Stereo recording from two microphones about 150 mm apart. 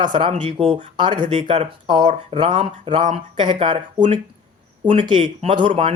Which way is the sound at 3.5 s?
35° right (ahead or behind).